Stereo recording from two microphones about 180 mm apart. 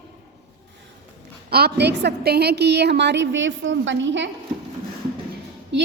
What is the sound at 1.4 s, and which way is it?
A woman's voice, 60° right (ahead or behind).